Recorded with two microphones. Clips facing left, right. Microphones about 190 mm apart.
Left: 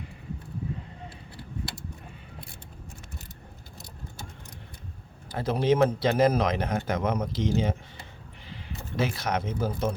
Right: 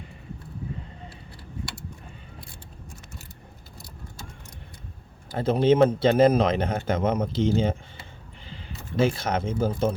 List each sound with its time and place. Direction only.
5.4 s speech: 25° right (ahead or behind)
9.0 s speech: 30° right (ahead or behind)